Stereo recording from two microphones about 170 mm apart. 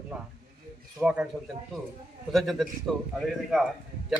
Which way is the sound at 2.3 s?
Centre (ahead or behind).